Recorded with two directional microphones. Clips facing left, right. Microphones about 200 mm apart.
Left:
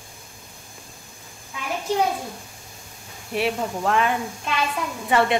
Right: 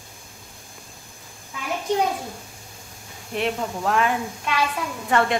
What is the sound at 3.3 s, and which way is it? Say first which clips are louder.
Speech: left 1 dB; 5° left (ahead or behind).